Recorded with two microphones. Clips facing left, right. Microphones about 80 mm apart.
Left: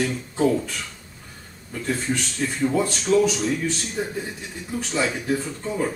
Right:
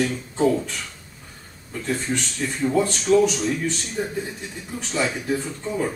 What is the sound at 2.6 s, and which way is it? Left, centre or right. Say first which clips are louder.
A man's voice: right 2 dB; centre.